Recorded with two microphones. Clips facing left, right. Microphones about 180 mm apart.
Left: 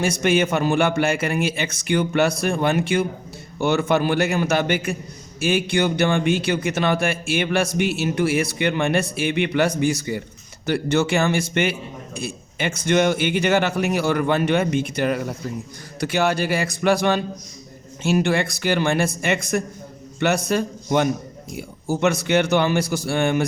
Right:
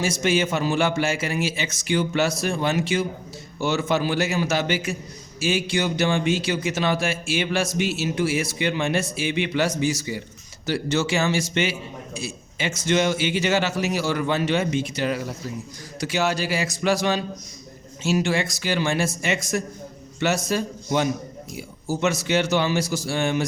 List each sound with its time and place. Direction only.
0.0 s a man's voice: 55° left (ahead or behind)